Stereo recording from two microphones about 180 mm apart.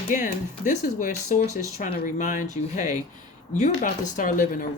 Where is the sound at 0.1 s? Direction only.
45° left (ahead or behind).